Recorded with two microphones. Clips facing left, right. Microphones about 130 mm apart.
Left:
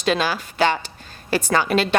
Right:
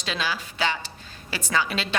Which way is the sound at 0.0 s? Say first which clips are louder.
Left 8 dB; 55° left (ahead or behind).